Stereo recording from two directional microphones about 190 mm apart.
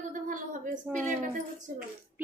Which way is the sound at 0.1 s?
45° right (ahead or behind).